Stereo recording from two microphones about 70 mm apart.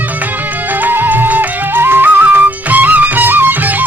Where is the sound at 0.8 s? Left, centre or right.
Right.